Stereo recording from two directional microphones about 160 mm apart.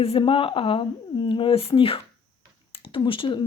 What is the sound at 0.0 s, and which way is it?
Speech, 35° left (ahead or behind).